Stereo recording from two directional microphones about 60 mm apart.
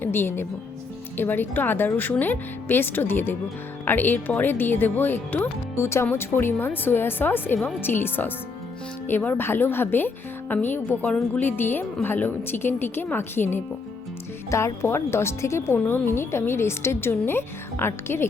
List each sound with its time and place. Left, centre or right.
0.0 s speech: left
5.8 s speech: left
14.5 s speech: left